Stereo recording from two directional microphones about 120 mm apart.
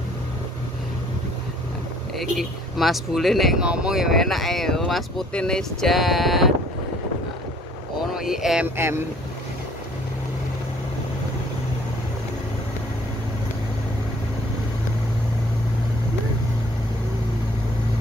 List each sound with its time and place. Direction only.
2.1 s speech: centre (ahead or behind)
8.1 s speech: 5° right (ahead or behind)
8.7 s speech: 20° right (ahead or behind)